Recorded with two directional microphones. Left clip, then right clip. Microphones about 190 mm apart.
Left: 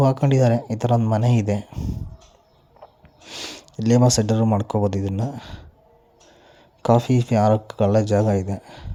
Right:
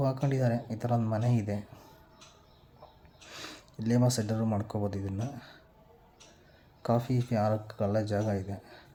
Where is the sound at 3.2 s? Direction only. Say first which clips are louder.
Left 11 dB; 30° left (ahead or behind).